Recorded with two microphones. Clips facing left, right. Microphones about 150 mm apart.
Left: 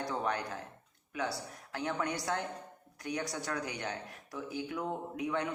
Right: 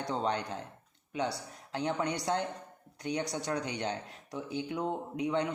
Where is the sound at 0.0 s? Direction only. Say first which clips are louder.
Right 2 dB; 20° right (ahead or behind).